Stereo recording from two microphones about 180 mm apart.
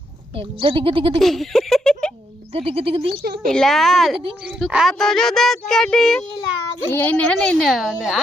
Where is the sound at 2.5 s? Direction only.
35° right (ahead or behind).